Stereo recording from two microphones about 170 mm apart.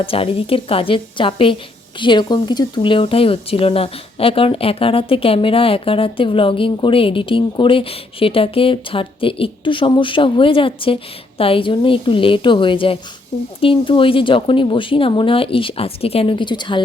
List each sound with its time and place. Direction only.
0.0 s speech: 35° left (ahead or behind)